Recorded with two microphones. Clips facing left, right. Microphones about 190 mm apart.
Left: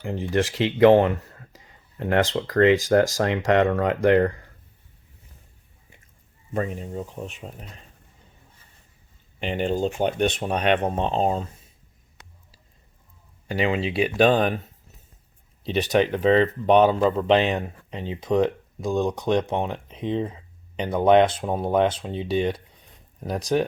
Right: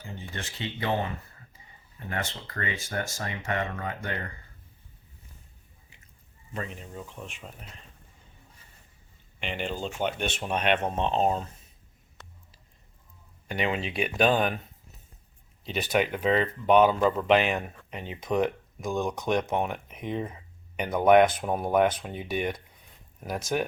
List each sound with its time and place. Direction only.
0.0 s speech: 85° left
6.5 s speech: 40° left (ahead or behind)
9.4 s speech: 40° left (ahead or behind)
13.5 s speech: 30° left (ahead or behind)
15.6 s speech: 35° left (ahead or behind)